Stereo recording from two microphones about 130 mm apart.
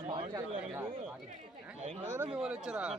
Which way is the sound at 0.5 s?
5° right (ahead or behind).